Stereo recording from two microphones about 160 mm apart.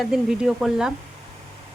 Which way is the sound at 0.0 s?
5° right (ahead or behind).